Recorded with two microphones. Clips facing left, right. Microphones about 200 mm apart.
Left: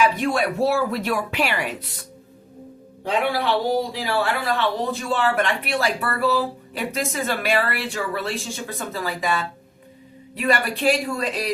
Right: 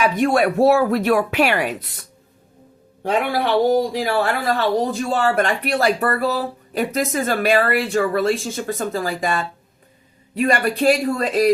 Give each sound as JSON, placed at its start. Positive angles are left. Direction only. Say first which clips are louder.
{"t": 0.2, "sound": "a man's voice", "louder": "right 6 dB", "side_deg": -55}
{"t": 3.0, "sound": "a man's voice", "louder": "right 2 dB", "side_deg": -50}